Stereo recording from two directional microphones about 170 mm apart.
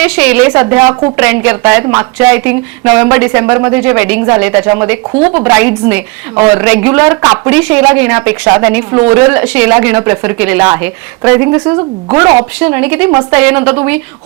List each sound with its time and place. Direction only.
0.0 s speech: 5° right (ahead or behind)
11.8 s speech: 25° right (ahead or behind)
12.5 s speech: 5° right (ahead or behind)